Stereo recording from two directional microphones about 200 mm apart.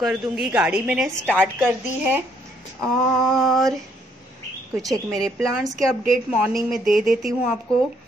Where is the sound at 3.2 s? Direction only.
Centre (ahead or behind).